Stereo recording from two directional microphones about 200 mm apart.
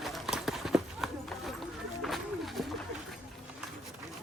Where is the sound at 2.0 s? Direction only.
Centre (ahead or behind).